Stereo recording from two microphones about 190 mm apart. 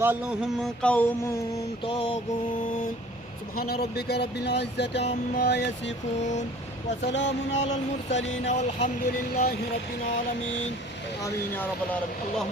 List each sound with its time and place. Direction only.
0.0 s a sound: 10° right (ahead or behind)
0.6 s mantra: 5° left (ahead or behind)
1.8 s mantra: 25° left (ahead or behind)
3.6 s speech: 55° left (ahead or behind)
7.1 s music: 70° left (ahead or behind)
8.4 s a sound: 35° left (ahead or behind)
9.3 s speech: 55° left (ahead or behind)
11.2 s mantra: 10° left (ahead or behind)